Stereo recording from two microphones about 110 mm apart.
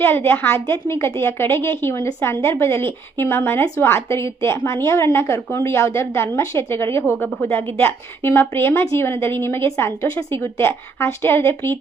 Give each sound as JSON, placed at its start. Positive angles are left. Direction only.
{"t": 0.3, "sound": "a woman's voice", "side_deg": 20}